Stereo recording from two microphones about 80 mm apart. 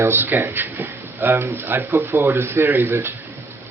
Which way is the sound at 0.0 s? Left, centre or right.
Right.